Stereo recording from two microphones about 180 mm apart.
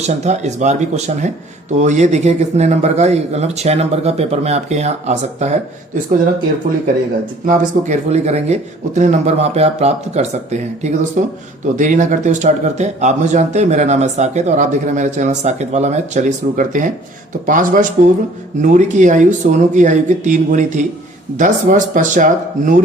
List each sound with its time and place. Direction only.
0.3 s speech: 40° right (ahead or behind)
7.4 s speech: 45° right (ahead or behind)